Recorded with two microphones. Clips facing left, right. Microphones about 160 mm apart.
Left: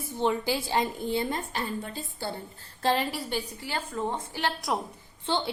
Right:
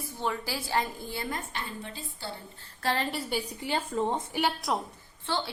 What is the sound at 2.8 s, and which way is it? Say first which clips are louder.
Speech: left 4 dB; 15° left (ahead or behind).